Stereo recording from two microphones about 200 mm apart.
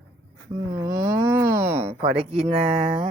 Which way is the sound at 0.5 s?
15° right (ahead or behind).